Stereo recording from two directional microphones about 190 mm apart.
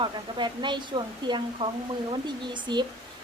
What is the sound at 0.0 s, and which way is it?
Speech, 25° right (ahead or behind).